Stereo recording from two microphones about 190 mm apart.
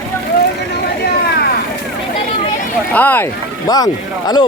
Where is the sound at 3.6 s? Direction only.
20° left (ahead or behind).